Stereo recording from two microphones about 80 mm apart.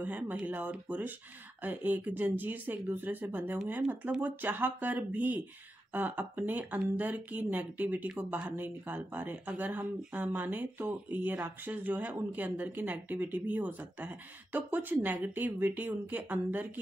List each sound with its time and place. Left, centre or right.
0.0 s speech: centre